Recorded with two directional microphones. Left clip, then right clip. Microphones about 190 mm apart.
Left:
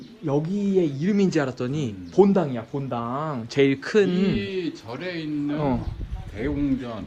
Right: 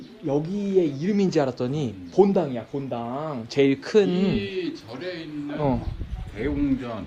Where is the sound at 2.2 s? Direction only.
5° left (ahead or behind).